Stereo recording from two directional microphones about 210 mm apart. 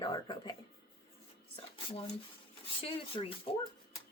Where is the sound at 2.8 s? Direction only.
25° left (ahead or behind).